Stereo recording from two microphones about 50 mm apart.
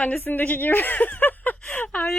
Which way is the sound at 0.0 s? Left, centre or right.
Left.